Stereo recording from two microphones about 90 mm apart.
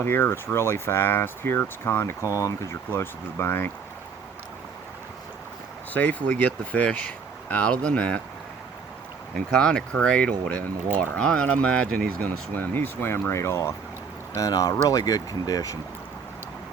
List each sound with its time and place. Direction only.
0.0 s speech: 25° left (ahead or behind)
5.9 s speech: 15° left (ahead or behind)
9.3 s speech: 10° left (ahead or behind); by 15.8 s 40° left (ahead or behind)